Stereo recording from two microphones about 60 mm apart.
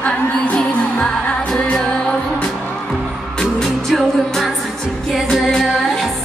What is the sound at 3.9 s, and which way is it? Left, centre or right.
Music, centre.